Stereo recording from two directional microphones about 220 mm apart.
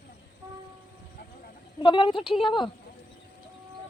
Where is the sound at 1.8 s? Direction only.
20° left (ahead or behind).